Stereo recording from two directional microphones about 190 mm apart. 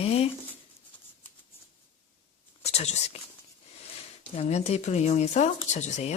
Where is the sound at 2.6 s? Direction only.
35° left (ahead or behind).